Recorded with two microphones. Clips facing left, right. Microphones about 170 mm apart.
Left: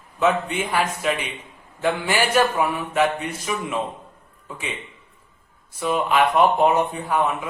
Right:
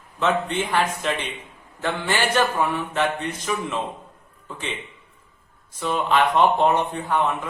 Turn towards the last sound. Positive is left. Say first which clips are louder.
# left 1 dB
turn(degrees=10)  # may be behind; listen again after turning